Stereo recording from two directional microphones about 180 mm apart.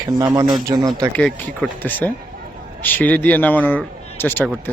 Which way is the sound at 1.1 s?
5° left (ahead or behind).